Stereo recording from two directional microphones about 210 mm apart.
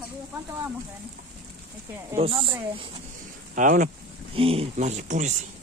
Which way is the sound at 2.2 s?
25° right (ahead or behind).